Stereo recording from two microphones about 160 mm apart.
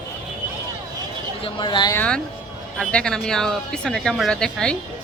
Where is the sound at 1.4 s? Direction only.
30° left (ahead or behind).